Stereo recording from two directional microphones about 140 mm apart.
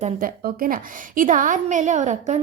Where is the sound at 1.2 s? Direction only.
70° right (ahead or behind).